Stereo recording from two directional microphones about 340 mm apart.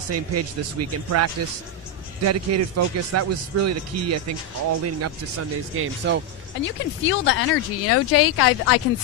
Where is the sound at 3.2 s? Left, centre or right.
Right.